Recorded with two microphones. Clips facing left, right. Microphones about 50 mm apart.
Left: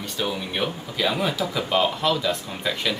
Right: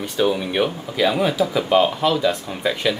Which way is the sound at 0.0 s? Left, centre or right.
Centre.